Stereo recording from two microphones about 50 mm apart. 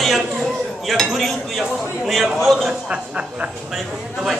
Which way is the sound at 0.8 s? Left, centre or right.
Centre.